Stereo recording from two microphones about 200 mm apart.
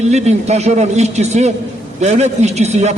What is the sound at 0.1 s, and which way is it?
A man's voice, 35° right (ahead or behind).